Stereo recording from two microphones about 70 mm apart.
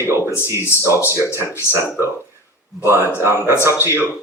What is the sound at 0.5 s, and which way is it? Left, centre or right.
Speech, left.